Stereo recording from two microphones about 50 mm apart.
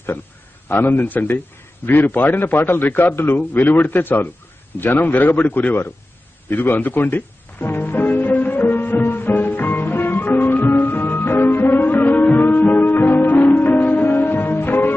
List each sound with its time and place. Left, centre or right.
0.7 s a man's voice: left
6.5 s music: left